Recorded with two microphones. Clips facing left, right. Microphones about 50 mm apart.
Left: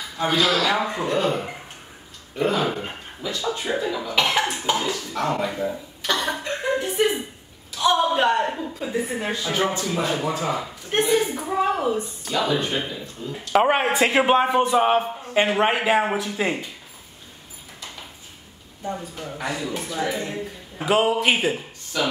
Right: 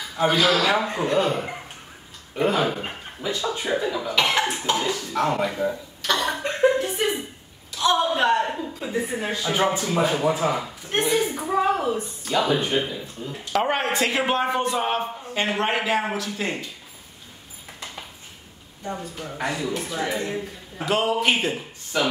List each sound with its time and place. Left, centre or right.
0.2 s speech: centre
2.3 s speech: centre
3.2 s speech: right
3.4 s a woman's voice: centre
9.5 s speech: centre
10.9 s a woman's voice: centre
13.5 s a man's voice: centre
18.9 s a woman's voice: centre
20.8 s a man's voice: centre
21.9 s speech: centre